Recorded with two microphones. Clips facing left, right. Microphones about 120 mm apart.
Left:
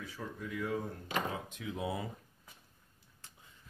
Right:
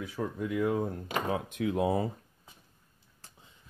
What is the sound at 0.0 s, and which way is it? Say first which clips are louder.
Speech: right 9 dB; 55° right (ahead or behind).